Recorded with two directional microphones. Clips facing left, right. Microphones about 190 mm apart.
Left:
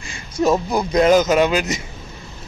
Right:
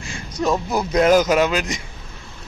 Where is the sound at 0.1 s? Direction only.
5° left (ahead or behind).